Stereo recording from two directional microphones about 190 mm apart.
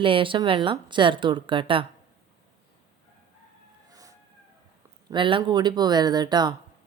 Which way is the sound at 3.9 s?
20° right (ahead or behind).